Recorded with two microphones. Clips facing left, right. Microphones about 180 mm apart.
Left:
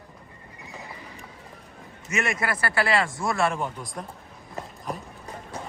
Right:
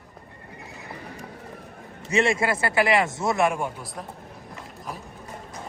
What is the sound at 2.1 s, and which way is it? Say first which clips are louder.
Speech: right 5 dB; 30° right (ahead or behind).